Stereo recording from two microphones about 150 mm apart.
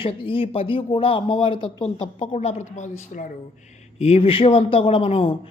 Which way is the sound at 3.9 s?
45° left (ahead or behind).